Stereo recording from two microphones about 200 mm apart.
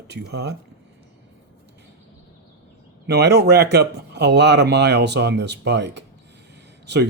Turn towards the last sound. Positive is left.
turn(degrees=-60)  # may be behind; listen again after turning